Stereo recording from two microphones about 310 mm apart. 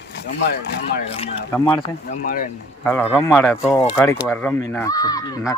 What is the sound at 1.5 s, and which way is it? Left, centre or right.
Speech, centre.